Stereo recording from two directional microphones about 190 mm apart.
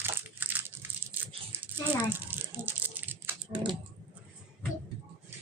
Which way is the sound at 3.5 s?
25° right (ahead or behind).